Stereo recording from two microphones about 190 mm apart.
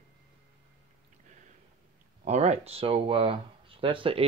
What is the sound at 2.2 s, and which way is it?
Speech, 35° right (ahead or behind).